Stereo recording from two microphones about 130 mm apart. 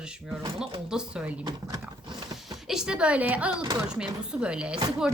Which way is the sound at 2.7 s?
5° right (ahead or behind).